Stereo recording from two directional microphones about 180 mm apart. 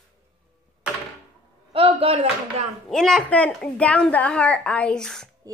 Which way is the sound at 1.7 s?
35° right (ahead or behind).